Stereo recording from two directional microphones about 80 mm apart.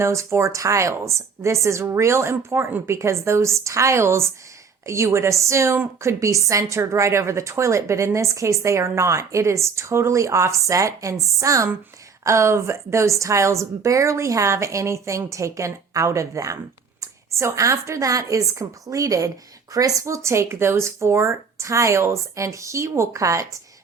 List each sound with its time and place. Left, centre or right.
0.0 s a woman's voice: right